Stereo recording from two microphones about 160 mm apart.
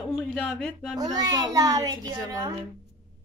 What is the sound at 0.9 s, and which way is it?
A child's voice, 25° right (ahead or behind).